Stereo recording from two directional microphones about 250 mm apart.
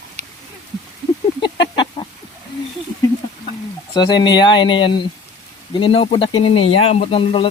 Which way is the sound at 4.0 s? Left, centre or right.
Centre.